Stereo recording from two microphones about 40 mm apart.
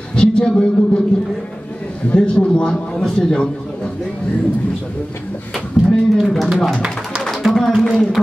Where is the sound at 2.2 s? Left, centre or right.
Left.